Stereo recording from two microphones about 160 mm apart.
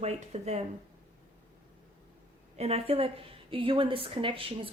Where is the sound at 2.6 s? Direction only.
40° right (ahead or behind).